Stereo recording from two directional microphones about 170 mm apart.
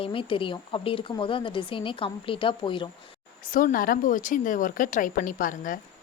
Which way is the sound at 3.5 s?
55° left (ahead or behind).